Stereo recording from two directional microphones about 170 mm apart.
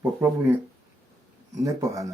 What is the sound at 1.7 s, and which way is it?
Speech, 20° right (ahead or behind).